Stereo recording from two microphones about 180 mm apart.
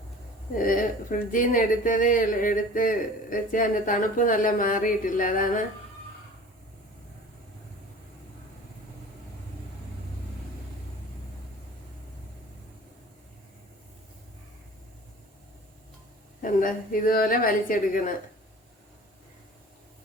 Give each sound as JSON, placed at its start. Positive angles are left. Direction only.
{"t": 0.5, "sound": "speech", "side_deg": 50}
{"t": 16.4, "sound": "speech", "side_deg": 50}